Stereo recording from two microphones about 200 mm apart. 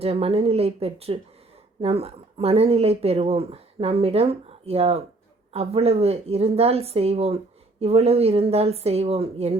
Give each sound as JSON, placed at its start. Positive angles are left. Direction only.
{"t": 0.0, "sound": "speech", "side_deg": -30}